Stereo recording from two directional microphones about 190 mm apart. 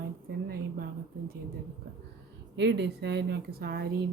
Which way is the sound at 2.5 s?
65° right (ahead or behind).